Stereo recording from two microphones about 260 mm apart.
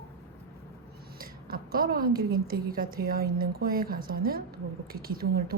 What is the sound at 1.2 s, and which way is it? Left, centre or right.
A woman's voice, right.